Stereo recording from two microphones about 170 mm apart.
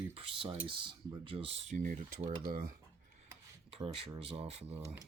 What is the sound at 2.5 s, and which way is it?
Speech, 60° right (ahead or behind).